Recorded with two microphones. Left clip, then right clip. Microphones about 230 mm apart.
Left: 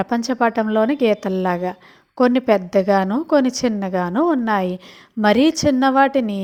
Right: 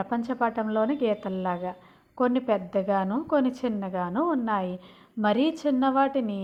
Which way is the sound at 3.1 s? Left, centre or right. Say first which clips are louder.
Left 8 dB; left.